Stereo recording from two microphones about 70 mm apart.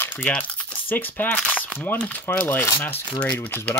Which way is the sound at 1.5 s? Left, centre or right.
Left.